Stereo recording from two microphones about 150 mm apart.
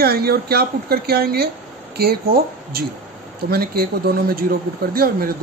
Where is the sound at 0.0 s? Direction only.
90° right.